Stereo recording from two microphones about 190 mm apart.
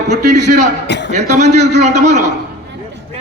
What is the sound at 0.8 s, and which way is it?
Speech, 65° left (ahead or behind).